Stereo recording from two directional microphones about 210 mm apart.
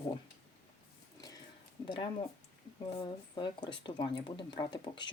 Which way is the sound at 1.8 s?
25° left (ahead or behind).